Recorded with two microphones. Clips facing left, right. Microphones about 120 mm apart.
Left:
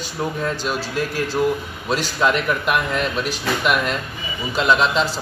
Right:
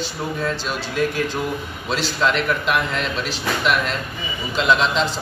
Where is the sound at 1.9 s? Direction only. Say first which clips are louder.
Left 1 dB; 10° left (ahead or behind).